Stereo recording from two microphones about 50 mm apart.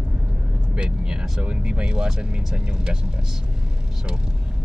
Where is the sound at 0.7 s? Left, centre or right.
Centre.